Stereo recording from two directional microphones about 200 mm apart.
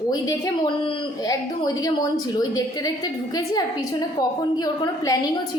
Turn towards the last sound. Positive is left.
turn(degrees=20)  # may be behind; listen again after turning